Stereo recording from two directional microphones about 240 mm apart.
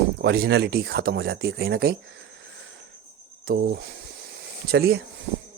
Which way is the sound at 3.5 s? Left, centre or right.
Right.